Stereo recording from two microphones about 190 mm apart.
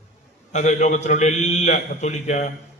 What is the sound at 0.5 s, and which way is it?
A man's voice, 40° left (ahead or behind).